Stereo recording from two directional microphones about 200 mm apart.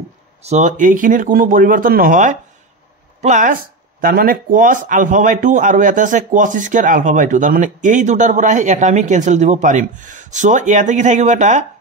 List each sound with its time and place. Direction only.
0.4 s speech: 35° right (ahead or behind)
4.0 s speech: 45° right (ahead or behind)